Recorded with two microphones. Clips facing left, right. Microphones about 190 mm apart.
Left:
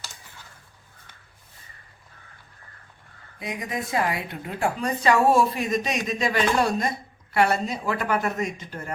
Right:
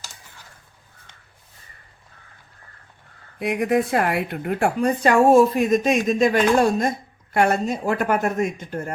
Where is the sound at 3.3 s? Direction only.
65° right (ahead or behind).